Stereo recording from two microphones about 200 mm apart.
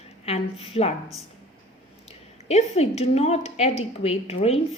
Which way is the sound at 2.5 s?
30° left (ahead or behind).